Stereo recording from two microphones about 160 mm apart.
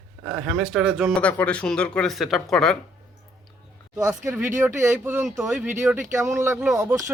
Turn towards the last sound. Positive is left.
turn(degrees=-20)  # may be behind; listen again after turning